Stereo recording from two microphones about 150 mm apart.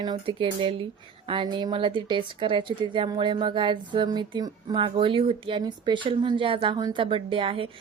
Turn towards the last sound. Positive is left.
turn(degrees=-35)  # may be behind; listen again after turning